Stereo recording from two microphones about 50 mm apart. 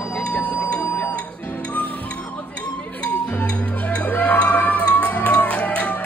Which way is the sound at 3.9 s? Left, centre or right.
Left.